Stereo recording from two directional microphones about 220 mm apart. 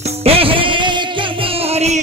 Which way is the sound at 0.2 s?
25° right (ahead or behind).